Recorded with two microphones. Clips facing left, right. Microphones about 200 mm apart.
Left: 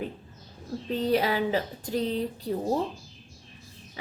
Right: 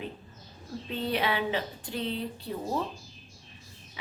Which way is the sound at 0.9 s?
40° left (ahead or behind).